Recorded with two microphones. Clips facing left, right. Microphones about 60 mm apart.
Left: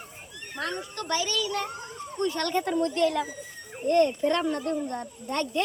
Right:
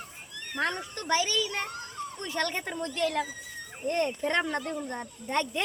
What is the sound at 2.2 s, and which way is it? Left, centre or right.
Speech, right.